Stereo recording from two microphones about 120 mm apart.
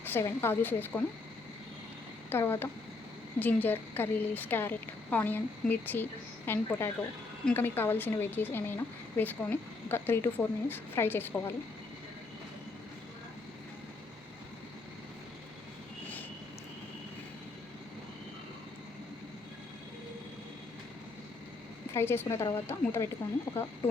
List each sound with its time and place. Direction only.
0.0 s a woman's voice: 20° left (ahead or behind)
2.3 s a woman's voice: 20° left (ahead or behind)
21.9 s a woman's voice: 20° left (ahead or behind)